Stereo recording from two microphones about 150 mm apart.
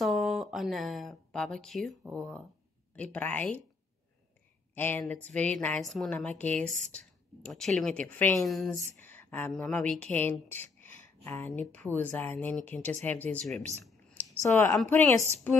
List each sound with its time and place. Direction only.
0.0 s a woman's voice: centre (ahead or behind)
4.7 s a woman's voice: 10° left (ahead or behind)
6.6 s speech: 55° right (ahead or behind)
7.4 s speech: 5° left (ahead or behind)
8.4 s speech: centre (ahead or behind)
9.0 s a woman's voice: 15° left (ahead or behind)
10.5 s a sound: 15° left (ahead or behind)
11.6 s a woman's voice: 5° left (ahead or behind)
14.4 s a woman's voice: 20° left (ahead or behind)